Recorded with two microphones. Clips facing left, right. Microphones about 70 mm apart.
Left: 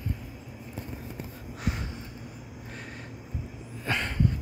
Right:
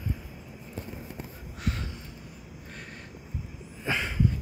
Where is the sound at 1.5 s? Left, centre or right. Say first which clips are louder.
Even; centre.